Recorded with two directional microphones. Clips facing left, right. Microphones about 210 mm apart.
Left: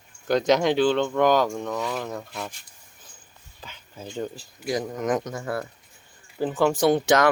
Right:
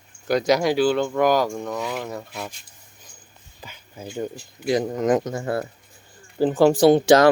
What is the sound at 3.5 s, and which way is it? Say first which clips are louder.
Speech: right 2 dB; 10° right (ahead or behind).